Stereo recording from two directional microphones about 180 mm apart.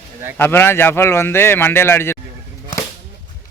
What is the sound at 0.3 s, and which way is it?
Speech, 10° left (ahead or behind).